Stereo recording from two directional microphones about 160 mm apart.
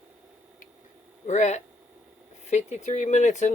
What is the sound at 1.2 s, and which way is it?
Speech, 45° left (ahead or behind).